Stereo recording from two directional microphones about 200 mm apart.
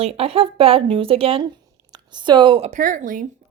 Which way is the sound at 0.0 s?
30° right (ahead or behind).